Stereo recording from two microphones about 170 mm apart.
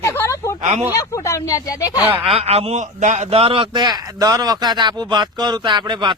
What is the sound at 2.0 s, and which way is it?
Speech, 10° right (ahead or behind).